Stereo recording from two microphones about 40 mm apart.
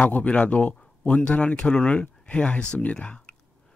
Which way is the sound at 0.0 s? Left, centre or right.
Left.